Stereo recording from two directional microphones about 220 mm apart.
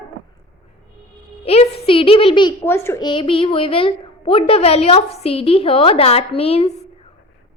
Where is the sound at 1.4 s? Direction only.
25° left (ahead or behind).